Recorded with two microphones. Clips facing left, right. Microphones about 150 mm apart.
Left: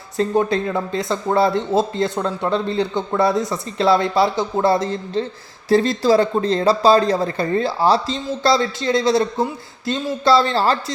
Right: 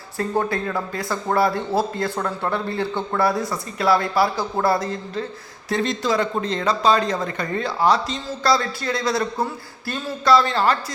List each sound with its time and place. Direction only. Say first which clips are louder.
0.2 s speech: left 5 dB; 20° left (ahead or behind)